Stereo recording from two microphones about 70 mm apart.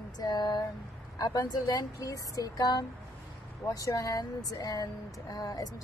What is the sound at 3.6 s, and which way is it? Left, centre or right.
Speech, left.